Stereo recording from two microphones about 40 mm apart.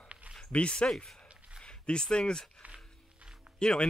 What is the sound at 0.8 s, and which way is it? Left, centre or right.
Speech, left.